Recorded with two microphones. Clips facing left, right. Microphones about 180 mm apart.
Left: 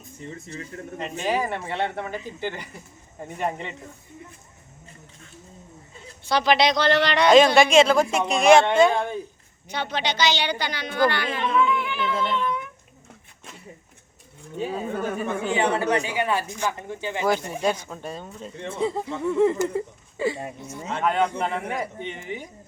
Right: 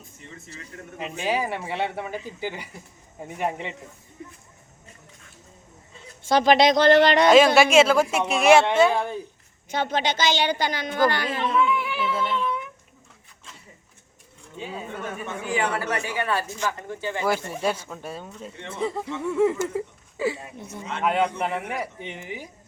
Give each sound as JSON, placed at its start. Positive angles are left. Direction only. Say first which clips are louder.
{"t": 0.2, "sound": "speech", "louder": "left 8 dB", "side_deg": 35}
{"t": 0.9, "sound": "speech", "louder": "left 1 dB", "side_deg": -5}
{"t": 6.2, "sound": "a child's voice", "louder": "right 3 dB", "side_deg": -45}
{"t": 7.3, "sound": "speech", "louder": "left 4 dB", "side_deg": -5}
{"t": 9.6, "sound": "a child's voice", "louder": "right 3 dB", "side_deg": -45}
{"t": 11.5, "sound": "music", "louder": "left 1 dB", "side_deg": -5}
{"t": 14.6, "sound": "speech", "louder": "left 6 dB", "side_deg": 40}
{"t": 17.6, "sound": "speech", "louder": "left 1 dB", "side_deg": -5}